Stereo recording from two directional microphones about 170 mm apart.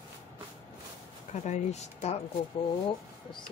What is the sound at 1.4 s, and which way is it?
Speech, 40° left (ahead or behind).